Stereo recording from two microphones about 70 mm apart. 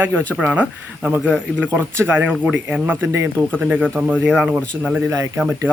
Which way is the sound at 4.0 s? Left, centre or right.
Right.